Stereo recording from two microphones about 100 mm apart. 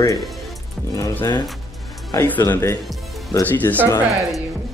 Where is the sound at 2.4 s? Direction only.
25° left (ahead or behind).